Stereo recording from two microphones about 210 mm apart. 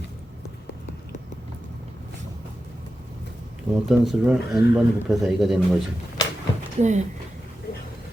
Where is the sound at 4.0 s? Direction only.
Centre (ahead or behind).